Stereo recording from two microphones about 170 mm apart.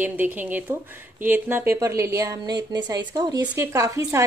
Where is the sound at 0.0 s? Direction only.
10° right (ahead or behind).